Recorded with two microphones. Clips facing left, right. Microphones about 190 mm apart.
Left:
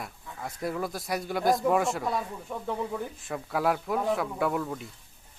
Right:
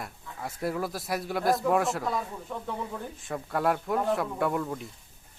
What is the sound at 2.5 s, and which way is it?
Speech, 10° left (ahead or behind).